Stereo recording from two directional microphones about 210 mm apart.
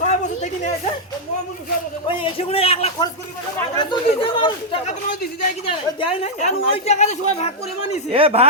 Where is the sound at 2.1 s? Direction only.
25° left (ahead or behind).